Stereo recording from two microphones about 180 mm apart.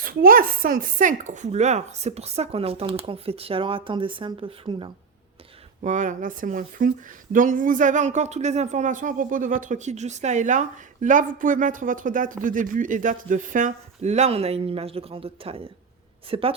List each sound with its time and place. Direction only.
0.0 s speech: 55° right (ahead or behind); by 4.9 s 30° right (ahead or behind)
5.8 s speech: 45° right (ahead or behind)